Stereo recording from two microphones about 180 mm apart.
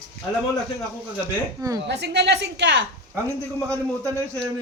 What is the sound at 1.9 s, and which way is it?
Speech, 70° right (ahead or behind).